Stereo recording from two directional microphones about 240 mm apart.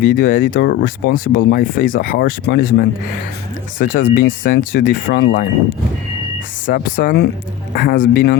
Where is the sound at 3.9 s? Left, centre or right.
Left.